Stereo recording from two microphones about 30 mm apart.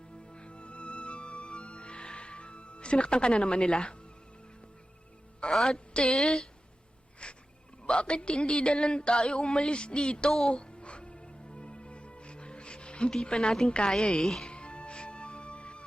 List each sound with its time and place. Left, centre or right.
0.3 s music: left
5.5 s speech: centre
5.9 s a sound: left
6.1 s speech: centre
7.2 s a sound: left
7.9 s speech: left
10.5 s music: left
13.2 s speech: left
14.4 s music: left